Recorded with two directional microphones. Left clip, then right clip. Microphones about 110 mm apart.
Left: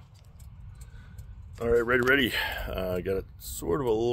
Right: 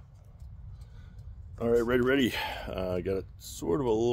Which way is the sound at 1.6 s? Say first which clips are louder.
Left 2 dB; 20° right (ahead or behind).